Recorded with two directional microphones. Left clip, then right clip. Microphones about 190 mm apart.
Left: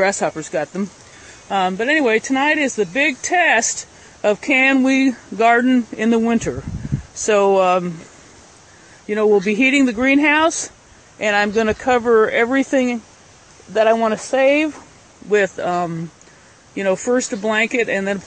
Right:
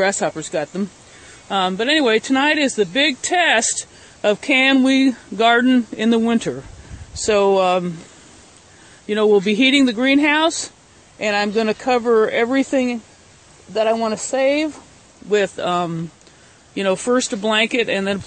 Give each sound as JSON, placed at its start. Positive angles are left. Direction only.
{"t": 0.4, "sound": "speech", "side_deg": -20}
{"t": 9.0, "sound": "speech", "side_deg": -25}
{"t": 13.7, "sound": "speech", "side_deg": 0}